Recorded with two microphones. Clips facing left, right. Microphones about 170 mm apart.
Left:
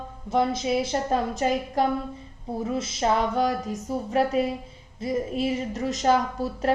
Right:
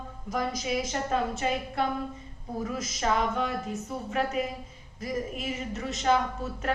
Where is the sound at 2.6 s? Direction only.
30° left (ahead or behind).